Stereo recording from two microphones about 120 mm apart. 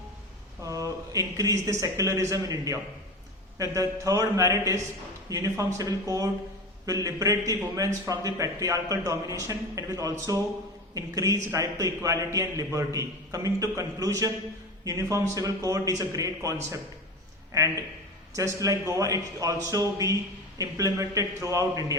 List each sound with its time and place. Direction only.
0.6 s a man's voice: 25° right (ahead or behind)